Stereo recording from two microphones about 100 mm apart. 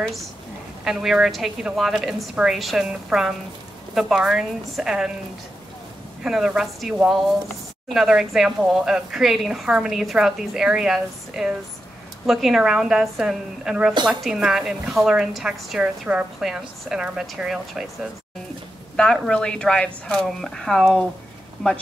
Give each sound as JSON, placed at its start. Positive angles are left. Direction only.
{"t": 0.8, "sound": "a woman's voice", "side_deg": -5}
{"t": 6.2, "sound": "a woman's voice", "side_deg": -5}
{"t": 18.9, "sound": "a woman's voice", "side_deg": 5}